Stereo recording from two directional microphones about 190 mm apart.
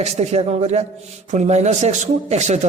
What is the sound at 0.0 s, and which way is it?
A man's voice, 35° right (ahead or behind).